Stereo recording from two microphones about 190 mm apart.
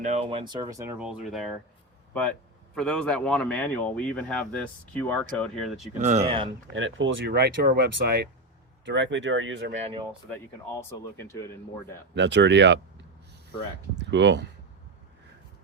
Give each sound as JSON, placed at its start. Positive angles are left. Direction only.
{"t": 0.0, "sound": "speech", "side_deg": -35}
{"t": 0.9, "sound": "speech", "side_deg": -5}
{"t": 2.7, "sound": "speech", "side_deg": 5}
{"t": 6.0, "sound": "speech", "side_deg": -35}
{"t": 6.7, "sound": "speech", "side_deg": -85}
{"t": 8.8, "sound": "speech", "side_deg": -70}
{"t": 9.7, "sound": "speech", "side_deg": -35}
{"t": 10.8, "sound": "speech", "side_deg": 15}
{"t": 12.1, "sound": "speech", "side_deg": -70}
{"t": 14.0, "sound": "speech", "side_deg": -70}